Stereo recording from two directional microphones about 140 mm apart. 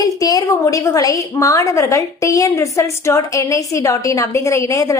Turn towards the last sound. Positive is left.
turn(degrees=25)  # may be behind; listen again after turning